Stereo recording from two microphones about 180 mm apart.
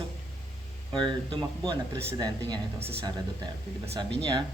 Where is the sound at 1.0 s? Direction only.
25° right (ahead or behind).